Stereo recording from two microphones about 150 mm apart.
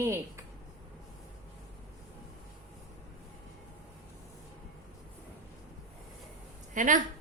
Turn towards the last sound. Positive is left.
turn(degrees=-60)  # may be behind; listen again after turning